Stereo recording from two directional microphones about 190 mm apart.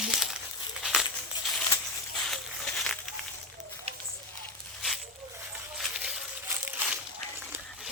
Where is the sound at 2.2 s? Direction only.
Centre (ahead or behind).